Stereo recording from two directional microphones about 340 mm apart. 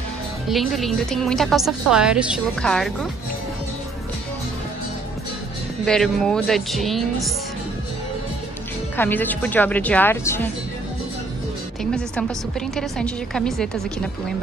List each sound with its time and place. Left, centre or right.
0.5 s a woman's voice: centre
5.9 s a woman's voice: centre
8.9 s a woman's voice: centre
11.8 s a woman's voice: centre